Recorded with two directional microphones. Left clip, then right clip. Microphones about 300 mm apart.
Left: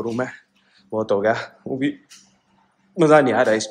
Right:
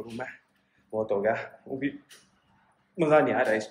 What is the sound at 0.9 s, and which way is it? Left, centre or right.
Speech, left.